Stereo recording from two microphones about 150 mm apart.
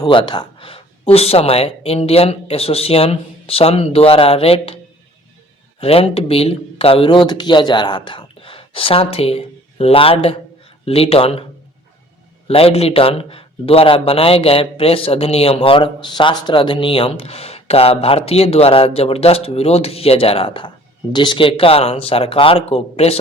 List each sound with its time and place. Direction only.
0.0 s a man's voice: 30° left (ahead or behind)
5.8 s a man's voice: 40° left (ahead or behind)
12.5 s a man's voice: 40° left (ahead or behind)